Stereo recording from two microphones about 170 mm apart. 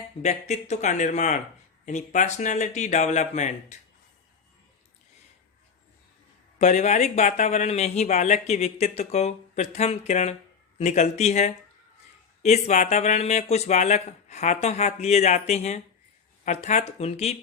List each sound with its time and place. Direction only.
0.2 s speech: 40° left (ahead or behind)
6.6 s speech: 45° left (ahead or behind)